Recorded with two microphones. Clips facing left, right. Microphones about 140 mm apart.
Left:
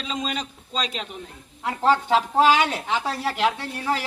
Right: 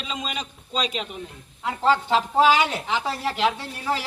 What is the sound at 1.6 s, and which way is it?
Speech, 10° left (ahead or behind).